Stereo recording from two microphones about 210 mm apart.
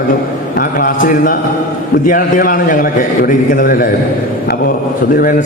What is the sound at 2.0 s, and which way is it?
A man's voice, 40° left (ahead or behind).